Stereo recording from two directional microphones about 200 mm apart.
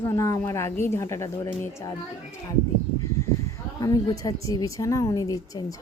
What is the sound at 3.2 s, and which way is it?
Speech, 15° left (ahead or behind).